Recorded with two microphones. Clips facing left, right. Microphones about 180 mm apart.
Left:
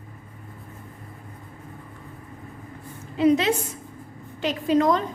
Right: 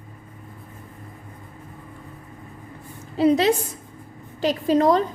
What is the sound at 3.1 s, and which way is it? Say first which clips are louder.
A woman's voice: right 2 dB; 35° right (ahead or behind).